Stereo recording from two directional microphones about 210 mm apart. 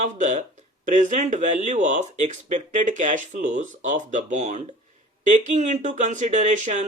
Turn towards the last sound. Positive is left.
turn(degrees=-35)  # may be behind; listen again after turning